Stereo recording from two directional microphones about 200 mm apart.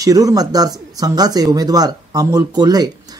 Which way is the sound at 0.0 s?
15° right (ahead or behind).